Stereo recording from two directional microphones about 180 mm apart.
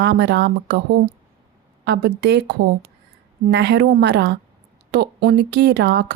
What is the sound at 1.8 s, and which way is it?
Speech, 65° right (ahead or behind).